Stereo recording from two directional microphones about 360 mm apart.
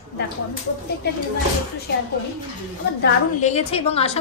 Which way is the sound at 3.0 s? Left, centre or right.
Centre.